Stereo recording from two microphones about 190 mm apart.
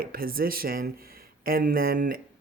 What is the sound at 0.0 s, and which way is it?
Speech, 50° right (ahead or behind).